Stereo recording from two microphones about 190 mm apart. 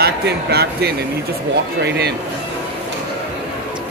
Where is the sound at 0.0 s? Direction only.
55° right (ahead or behind).